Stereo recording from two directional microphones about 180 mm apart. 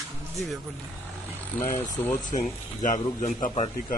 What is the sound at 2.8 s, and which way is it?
Speech, 45° left (ahead or behind).